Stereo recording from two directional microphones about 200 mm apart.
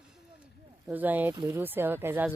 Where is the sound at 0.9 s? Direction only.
10° right (ahead or behind).